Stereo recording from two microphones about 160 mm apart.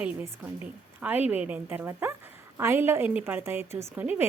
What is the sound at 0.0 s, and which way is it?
A woman's voice, 10° right (ahead or behind).